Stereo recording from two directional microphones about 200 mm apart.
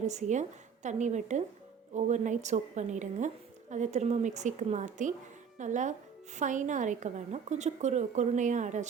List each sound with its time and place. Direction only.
0.1 s a woman's voice: 35° right (ahead or behind)